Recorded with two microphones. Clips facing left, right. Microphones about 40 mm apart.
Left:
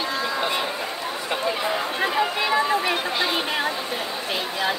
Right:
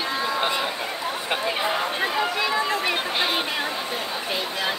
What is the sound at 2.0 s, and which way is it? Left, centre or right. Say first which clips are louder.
Speech: left 1 dB; centre.